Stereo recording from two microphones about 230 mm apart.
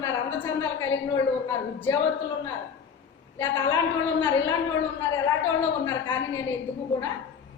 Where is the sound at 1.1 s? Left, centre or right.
Centre.